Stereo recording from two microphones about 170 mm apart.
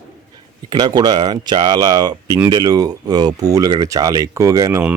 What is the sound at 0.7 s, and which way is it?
Speech, 25° right (ahead or behind).